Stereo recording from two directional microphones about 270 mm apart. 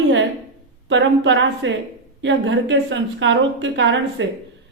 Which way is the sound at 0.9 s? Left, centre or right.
Right.